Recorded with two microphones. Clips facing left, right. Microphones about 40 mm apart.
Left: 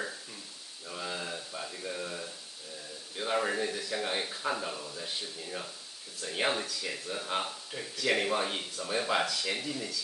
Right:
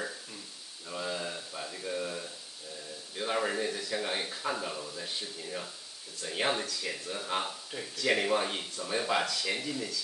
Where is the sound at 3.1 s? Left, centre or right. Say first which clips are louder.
Left 1 dB; centre.